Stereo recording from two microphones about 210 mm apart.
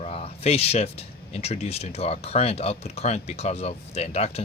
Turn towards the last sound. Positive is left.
turn(degrees=30)  # may be behind; listen again after turning